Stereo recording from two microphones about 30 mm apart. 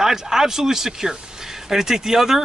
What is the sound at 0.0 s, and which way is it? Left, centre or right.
Speech, centre.